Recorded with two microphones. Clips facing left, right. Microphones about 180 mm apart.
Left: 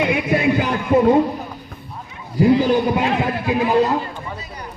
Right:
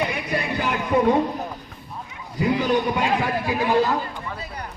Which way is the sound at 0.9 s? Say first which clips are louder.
Left 5 dB; 25° left (ahead or behind).